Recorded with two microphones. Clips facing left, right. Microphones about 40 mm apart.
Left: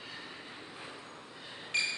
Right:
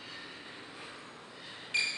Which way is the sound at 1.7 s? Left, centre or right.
Centre.